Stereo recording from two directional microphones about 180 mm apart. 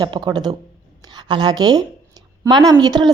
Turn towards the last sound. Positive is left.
turn(degrees=-20)  # may be behind; listen again after turning